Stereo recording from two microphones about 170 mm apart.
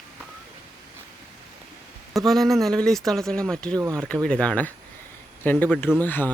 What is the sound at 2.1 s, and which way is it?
Speech, centre (ahead or behind).